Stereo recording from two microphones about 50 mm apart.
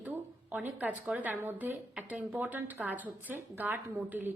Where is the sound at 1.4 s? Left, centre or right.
Right.